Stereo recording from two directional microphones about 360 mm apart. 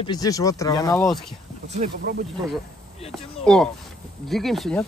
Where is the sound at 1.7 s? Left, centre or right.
Right.